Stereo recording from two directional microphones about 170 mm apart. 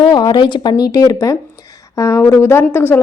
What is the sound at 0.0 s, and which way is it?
Speech, 30° left (ahead or behind).